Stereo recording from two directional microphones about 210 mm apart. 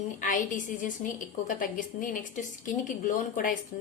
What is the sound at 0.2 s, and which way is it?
A woman's voice, 40° left (ahead or behind).